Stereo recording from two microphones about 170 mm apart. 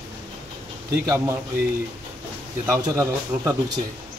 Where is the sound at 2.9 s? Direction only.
20° right (ahead or behind).